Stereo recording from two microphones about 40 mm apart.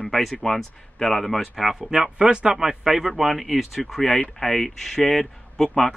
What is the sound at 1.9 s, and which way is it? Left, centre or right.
Speech, centre.